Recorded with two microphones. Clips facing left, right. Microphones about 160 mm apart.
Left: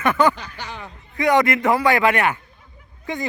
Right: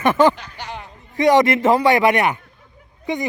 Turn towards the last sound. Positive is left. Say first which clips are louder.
# right 4 dB
turn(degrees=-15)  # may be behind; listen again after turning